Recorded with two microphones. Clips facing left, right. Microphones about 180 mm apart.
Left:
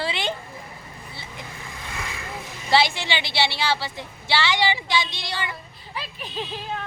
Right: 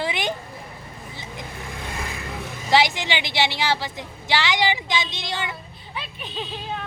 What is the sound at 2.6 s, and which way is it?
A woman's voice, 15° right (ahead or behind).